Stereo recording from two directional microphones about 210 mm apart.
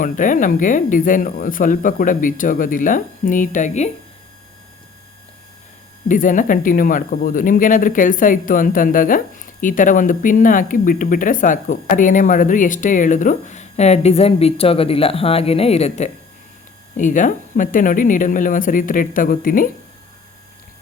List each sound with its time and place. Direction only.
0.0 s speech: 40° left (ahead or behind)
6.1 s speech: 40° left (ahead or behind)